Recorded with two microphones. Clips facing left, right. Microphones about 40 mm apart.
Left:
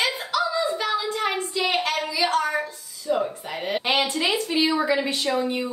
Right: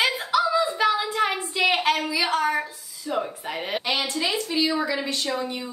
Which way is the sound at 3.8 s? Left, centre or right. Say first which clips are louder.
Left 4 dB; left.